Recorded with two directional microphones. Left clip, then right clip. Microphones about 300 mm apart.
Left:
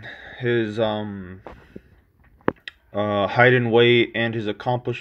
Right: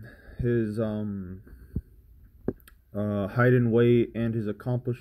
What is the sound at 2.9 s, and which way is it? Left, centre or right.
Speech, left.